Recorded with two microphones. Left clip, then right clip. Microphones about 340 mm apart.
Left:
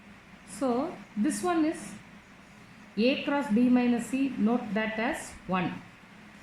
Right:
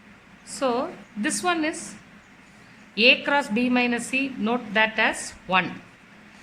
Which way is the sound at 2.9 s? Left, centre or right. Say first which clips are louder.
Right 9 dB; right.